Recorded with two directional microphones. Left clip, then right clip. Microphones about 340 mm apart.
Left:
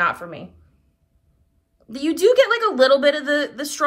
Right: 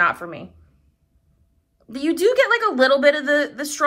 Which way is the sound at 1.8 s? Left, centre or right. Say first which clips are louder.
Left 2 dB; centre.